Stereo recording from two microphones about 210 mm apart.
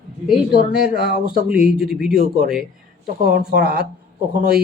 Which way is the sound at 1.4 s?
5° right (ahead or behind).